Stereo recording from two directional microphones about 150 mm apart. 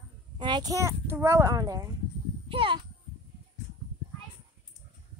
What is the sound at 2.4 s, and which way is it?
Speech, 35° right (ahead or behind).